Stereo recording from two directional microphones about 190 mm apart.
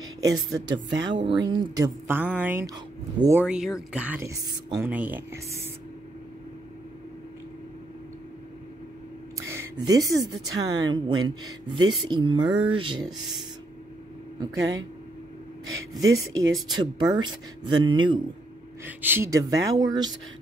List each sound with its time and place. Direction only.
0.2 s speech: 20° right (ahead or behind)
3.4 s speech: 5° right (ahead or behind)
9.4 s music: 15° right (ahead or behind)
10.6 s speech: 20° right (ahead or behind)
14.4 s speech: 20° right (ahead or behind)
16.0 s speech: 15° right (ahead or behind)
18.9 s speech: 10° right (ahead or behind)